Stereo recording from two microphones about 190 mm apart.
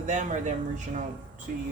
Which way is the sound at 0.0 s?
40° right (ahead or behind).